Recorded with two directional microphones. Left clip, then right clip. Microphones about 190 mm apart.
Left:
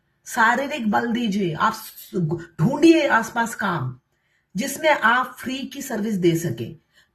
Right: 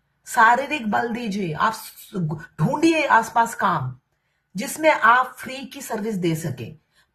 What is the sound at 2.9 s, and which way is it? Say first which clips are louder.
Speech: left 1 dB; 35° right (ahead or behind).